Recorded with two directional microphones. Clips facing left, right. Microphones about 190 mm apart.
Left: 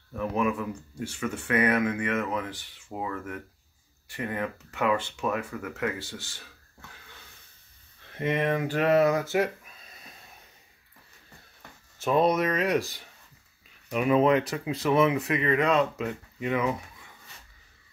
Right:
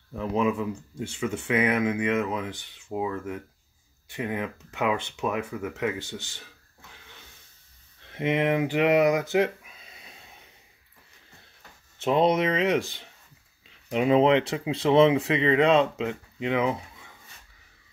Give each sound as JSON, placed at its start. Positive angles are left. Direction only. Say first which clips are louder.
{"t": 0.2, "sound": "speech", "louder": "right 2 dB", "side_deg": -20}
{"t": 8.1, "sound": "speech", "louder": "right 2 dB", "side_deg": -15}
{"t": 12.0, "sound": "speech", "louder": "right 1 dB", "side_deg": -25}